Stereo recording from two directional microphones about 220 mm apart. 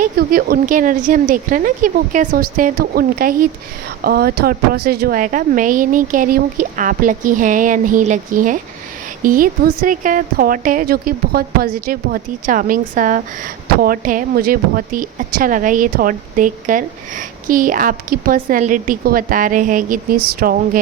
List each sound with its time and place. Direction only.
0.0 s a woman's voice: 40° right (ahead or behind)